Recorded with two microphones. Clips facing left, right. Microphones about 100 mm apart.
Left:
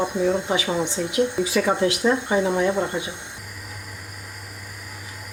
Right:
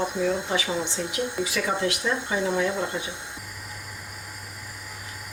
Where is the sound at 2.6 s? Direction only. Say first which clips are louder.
Left 4 dB; 30° left (ahead or behind).